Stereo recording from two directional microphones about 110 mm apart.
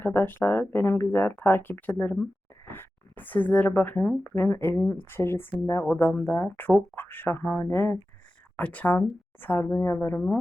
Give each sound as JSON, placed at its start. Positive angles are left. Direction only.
{"t": 0.0, "sound": "speech", "side_deg": 20}